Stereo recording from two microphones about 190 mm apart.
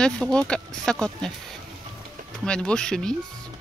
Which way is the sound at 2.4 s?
5° left (ahead or behind).